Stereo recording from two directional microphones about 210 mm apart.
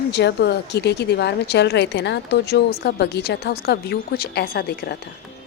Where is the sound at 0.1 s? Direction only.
55° left (ahead or behind).